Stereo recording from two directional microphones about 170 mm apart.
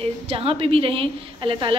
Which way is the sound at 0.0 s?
35° right (ahead or behind).